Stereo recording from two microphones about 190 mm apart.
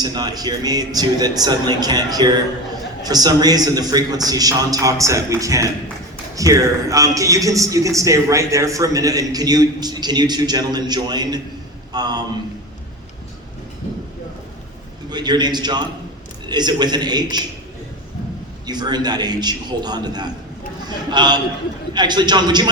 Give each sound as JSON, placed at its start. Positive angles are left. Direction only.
{"t": 0.0, "sound": "a man's voice", "side_deg": -20}
{"t": 15.1, "sound": "a man's voice", "side_deg": -20}
{"t": 18.6, "sound": "a man's voice", "side_deg": -20}